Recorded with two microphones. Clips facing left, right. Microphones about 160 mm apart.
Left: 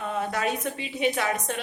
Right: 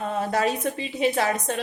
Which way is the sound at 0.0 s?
35° right (ahead or behind).